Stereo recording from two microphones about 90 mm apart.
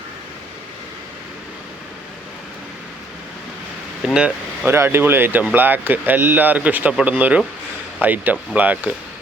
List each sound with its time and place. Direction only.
4.0 s speech: 5° right (ahead or behind)
4.6 s speech: 25° right (ahead or behind)